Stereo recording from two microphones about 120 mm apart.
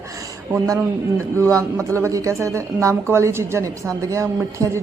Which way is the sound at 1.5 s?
25° right (ahead or behind).